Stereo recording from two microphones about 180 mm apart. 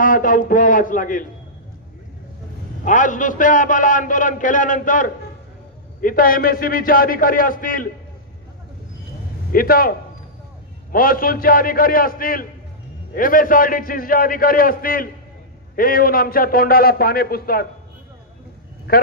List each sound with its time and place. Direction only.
0.0 s a man's voice: 50° left (ahead or behind)
2.8 s a man's voice: 45° left (ahead or behind)
9.5 s a man's voice: 55° left (ahead or behind)
18.9 s a man's voice: 55° left (ahead or behind)